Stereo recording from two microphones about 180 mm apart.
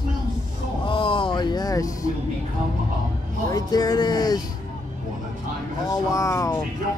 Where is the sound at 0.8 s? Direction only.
30° left (ahead or behind).